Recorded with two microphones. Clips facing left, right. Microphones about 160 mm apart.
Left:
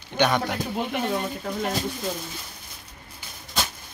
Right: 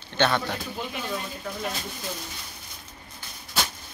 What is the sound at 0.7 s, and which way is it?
Speech, 60° left (ahead or behind).